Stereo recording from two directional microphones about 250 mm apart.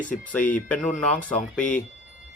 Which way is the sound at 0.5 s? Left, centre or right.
Centre.